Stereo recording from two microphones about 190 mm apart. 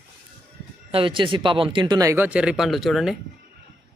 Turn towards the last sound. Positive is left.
turn(degrees=0)  # may be behind; listen again after turning